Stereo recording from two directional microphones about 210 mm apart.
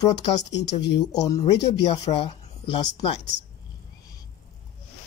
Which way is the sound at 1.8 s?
25° left (ahead or behind).